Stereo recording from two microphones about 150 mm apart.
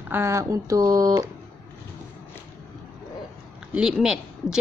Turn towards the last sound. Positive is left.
turn(degrees=-5)  # may be behind; listen again after turning